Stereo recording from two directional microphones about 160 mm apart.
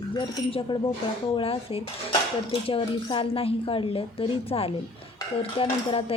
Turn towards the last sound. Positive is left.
turn(degrees=35)  # may be behind; listen again after turning